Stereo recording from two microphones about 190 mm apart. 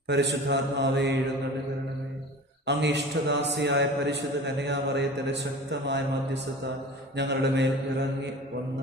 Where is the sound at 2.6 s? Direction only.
65° right (ahead or behind).